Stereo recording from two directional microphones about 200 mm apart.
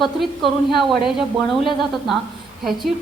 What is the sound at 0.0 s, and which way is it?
A woman's voice, centre (ahead or behind).